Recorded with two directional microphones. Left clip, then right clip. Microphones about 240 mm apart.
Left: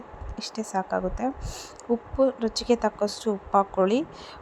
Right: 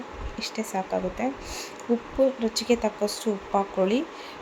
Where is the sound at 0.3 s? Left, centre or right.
Left.